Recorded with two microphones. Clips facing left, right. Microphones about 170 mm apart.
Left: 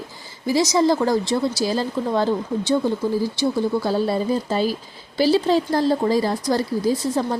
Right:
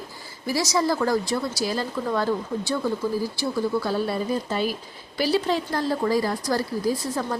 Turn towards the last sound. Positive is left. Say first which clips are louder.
# left 4 dB
turn(degrees=25)  # may be behind; listen again after turning